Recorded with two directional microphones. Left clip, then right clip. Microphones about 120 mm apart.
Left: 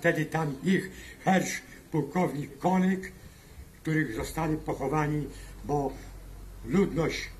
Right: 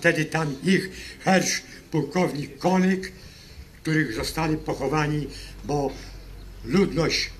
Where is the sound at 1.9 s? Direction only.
20° left (ahead or behind).